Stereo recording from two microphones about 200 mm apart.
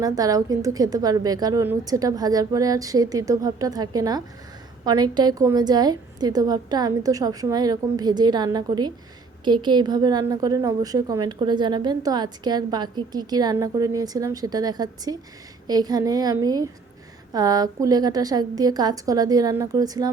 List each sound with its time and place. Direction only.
0.0 s a woman's voice: 20° right (ahead or behind)